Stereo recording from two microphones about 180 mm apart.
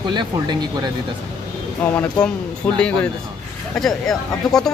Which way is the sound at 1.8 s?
5° left (ahead or behind).